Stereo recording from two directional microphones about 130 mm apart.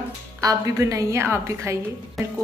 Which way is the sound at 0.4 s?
25° right (ahead or behind).